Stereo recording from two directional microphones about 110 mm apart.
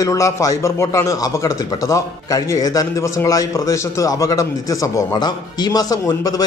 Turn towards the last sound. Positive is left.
turn(degrees=35)  # may be behind; listen again after turning